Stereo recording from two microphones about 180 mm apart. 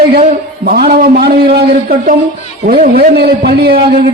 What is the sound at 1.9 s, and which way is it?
A man's voice, 50° right (ahead or behind).